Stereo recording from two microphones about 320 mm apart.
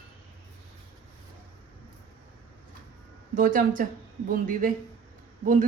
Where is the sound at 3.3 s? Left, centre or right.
Right.